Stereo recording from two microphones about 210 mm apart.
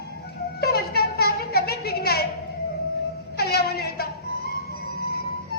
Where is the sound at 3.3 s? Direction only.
50° left (ahead or behind).